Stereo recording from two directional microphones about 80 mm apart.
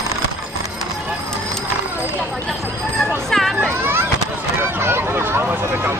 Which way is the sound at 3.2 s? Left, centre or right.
Centre.